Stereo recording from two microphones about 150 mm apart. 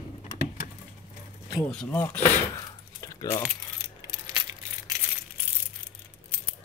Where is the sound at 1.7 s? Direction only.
5° left (ahead or behind).